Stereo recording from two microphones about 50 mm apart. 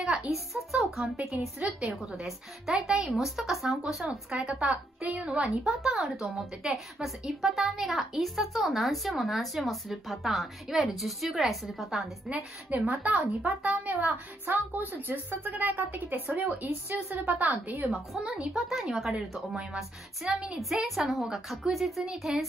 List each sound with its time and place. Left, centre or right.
0.0 s a sound: centre
0.7 s a child's voice: centre
1.1 s a woman's voice: centre
1.9 s a woman's voice: centre
4.3 s speech: right
5.6 s a woman's voice: centre
12.7 s speech: right
17.8 s a woman's voice: centre
18.2 s a woman's voice: centre
18.5 s a woman's voice: centre